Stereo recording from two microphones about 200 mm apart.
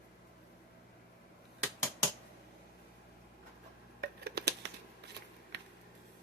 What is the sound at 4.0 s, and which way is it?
Scissors, 55° right (ahead or behind).